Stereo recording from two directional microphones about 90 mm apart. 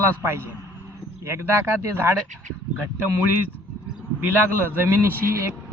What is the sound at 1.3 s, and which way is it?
Speech, 30° right (ahead or behind).